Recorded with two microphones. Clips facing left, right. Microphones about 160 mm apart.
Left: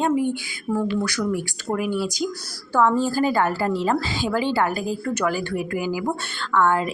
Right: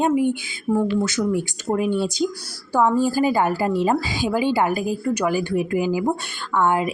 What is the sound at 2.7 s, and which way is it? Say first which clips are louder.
A woman's voice: right 1 dB; 10° right (ahead or behind).